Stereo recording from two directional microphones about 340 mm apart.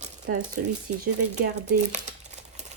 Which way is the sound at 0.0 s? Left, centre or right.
Right.